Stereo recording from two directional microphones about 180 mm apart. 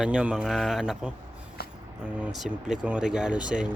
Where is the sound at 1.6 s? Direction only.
60° left (ahead or behind).